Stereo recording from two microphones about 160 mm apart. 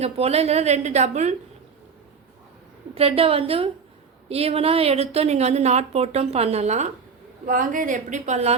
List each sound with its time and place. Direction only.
0.0 s a woman's voice: 40° right (ahead or behind)
2.9 s a woman's voice: 40° right (ahead or behind)
7.4 s a woman's voice: 60° right (ahead or behind)